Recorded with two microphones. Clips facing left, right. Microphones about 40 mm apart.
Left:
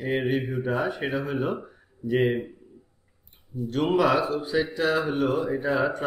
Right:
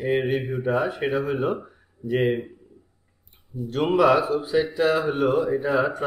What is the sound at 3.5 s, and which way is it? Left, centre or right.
Speech, right.